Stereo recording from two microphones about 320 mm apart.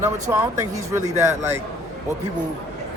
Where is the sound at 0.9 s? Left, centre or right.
Centre.